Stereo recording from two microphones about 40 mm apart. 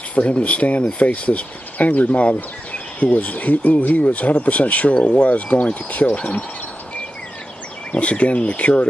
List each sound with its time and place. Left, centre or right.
0.1 s speech: left
7.9 s speech: left